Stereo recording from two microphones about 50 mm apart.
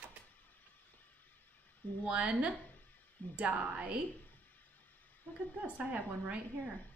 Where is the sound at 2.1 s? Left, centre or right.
Right.